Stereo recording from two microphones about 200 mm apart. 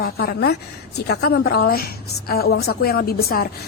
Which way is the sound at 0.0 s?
50° left (ahead or behind).